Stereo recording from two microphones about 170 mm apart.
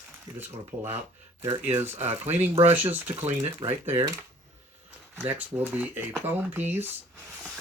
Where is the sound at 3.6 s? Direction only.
35° right (ahead or behind).